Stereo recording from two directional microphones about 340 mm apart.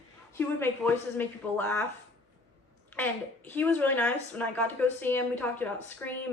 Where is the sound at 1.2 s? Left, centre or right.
Centre.